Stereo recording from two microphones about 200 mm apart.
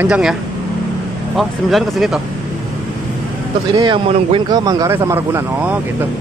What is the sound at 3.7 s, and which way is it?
Speech, 25° right (ahead or behind).